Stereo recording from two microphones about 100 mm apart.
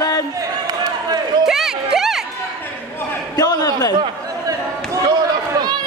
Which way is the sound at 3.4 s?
40° left (ahead or behind).